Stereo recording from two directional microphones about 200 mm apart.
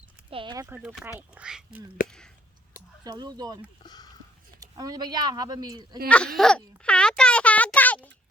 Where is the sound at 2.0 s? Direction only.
5° left (ahead or behind).